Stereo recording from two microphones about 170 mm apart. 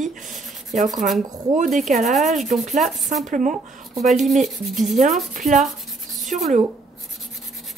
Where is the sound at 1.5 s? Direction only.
50° right (ahead or behind).